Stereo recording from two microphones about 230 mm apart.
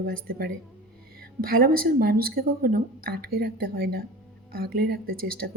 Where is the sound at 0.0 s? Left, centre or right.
Right.